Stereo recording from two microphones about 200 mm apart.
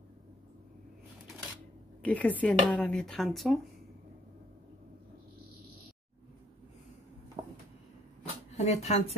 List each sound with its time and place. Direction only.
2.0 s a woman's voice: 5° left (ahead or behind)
8.5 s speech: 35° left (ahead or behind)